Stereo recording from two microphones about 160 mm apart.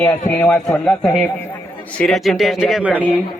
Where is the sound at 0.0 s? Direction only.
10° left (ahead or behind); by 3.0 s 5° right (ahead or behind).